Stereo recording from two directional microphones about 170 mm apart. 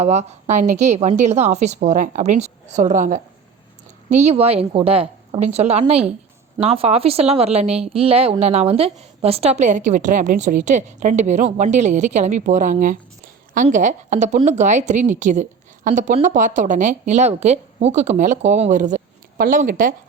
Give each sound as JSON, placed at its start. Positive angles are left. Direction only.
{"t": 0.0, "sound": "a woman's voice", "side_deg": -40}